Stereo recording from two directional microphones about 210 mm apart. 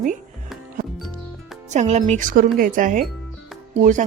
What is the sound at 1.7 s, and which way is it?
A woman's voice, 30° right (ahead or behind).